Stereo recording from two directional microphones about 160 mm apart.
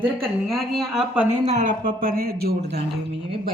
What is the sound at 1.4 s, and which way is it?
Speech, 50° right (ahead or behind).